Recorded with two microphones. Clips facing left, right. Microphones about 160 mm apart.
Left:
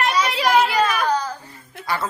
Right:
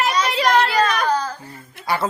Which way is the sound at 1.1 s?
15° left (ahead or behind).